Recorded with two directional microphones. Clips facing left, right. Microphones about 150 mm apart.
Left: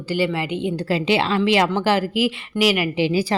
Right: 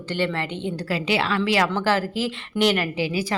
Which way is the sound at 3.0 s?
25° left (ahead or behind).